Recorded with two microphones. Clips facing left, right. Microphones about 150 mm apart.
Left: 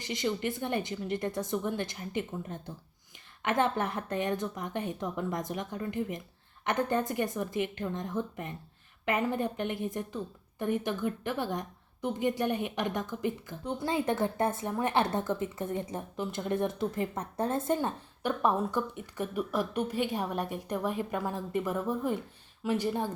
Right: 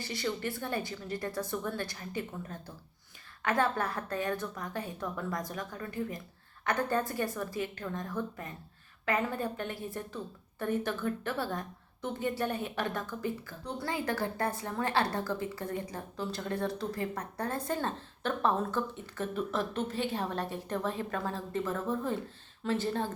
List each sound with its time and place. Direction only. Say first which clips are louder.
0.0 s a woman's voice: left 3 dB; 20° left (ahead or behind)